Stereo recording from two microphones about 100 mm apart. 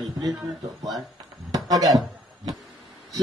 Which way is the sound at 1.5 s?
40° right (ahead or behind).